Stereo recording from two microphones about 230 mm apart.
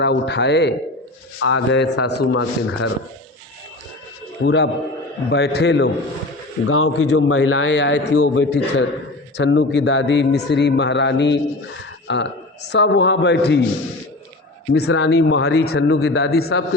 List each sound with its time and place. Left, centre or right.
0.0 s a man's voice: left
4.4 s a man's voice: left
6.7 s a man's voice: left
14.7 s a man's voice: left